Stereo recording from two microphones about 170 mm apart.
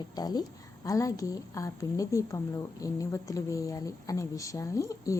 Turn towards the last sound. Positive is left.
turn(degrees=20)  # may be behind; listen again after turning